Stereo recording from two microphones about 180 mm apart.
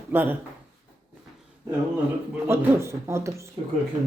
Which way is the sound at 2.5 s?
15° right (ahead or behind).